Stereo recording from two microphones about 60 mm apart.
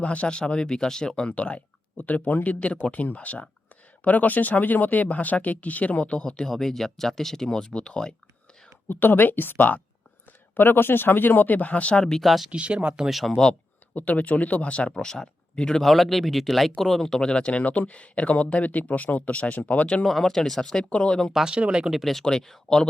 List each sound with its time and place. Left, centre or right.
0.0 s speech: left
8.9 s speech: left
12.0 s speech: centre
12.5 s speech: centre
13.9 s speech: left
14.9 s speech: centre
15.9 s speech: centre; by 20.1 s left
20.1 s speech: centre
21.3 s speech: centre
21.9 s speech: centre